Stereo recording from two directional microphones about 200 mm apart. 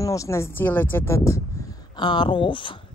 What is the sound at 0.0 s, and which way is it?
Speech, 15° left (ahead or behind).